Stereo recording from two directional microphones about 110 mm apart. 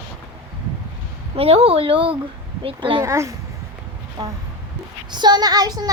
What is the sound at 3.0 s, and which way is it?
Speech, 25° right (ahead or behind).